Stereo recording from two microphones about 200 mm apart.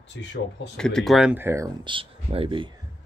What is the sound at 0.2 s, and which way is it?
Speech, 70° left (ahead or behind).